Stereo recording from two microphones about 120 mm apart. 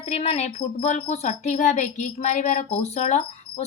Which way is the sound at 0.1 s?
65° left (ahead or behind).